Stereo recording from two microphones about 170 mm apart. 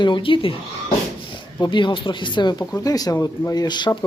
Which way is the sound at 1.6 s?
30° left (ahead or behind).